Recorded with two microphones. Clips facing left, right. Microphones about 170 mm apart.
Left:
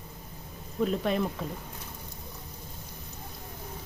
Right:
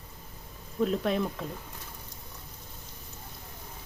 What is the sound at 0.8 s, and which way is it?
Speech, centre (ahead or behind).